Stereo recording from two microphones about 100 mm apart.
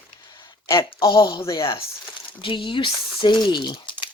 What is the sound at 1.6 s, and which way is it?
Speech, 65° left (ahead or behind).